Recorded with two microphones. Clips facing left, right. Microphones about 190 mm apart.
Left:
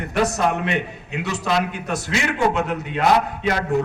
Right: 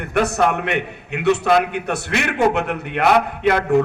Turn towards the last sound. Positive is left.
turn(degrees=-60)  # may be behind; listen again after turning